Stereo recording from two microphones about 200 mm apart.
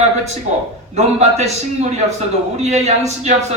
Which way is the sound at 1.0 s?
35° right (ahead or behind).